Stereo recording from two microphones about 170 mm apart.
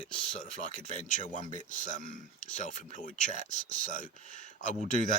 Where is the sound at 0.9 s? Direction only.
45° left (ahead or behind).